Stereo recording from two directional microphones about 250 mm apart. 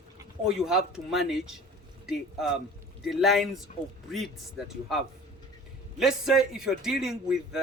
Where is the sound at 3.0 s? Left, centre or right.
Centre.